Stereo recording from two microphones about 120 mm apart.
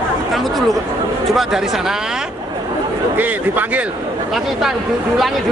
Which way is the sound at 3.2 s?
15° right (ahead or behind).